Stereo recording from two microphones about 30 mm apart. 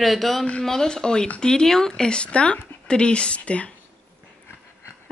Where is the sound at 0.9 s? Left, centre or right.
Left.